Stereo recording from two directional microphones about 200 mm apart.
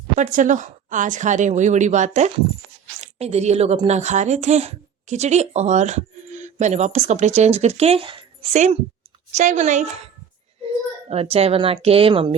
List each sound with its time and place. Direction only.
0.2 s a woman's voice: 40° right (ahead or behind)
11.1 s speech: 30° right (ahead or behind)